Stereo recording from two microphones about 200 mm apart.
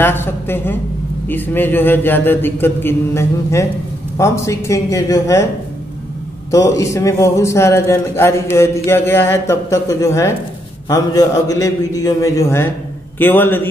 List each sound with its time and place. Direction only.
0.0 s a man's voice: 10° left (ahead or behind)
6.5 s a man's voice: 15° left (ahead or behind)